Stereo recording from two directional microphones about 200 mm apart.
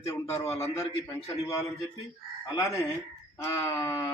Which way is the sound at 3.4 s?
15° left (ahead or behind).